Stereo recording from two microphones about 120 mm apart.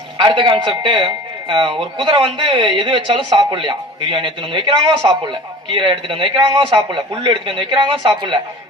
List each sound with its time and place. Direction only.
0.2 s a man's voice: 40° right (ahead or behind)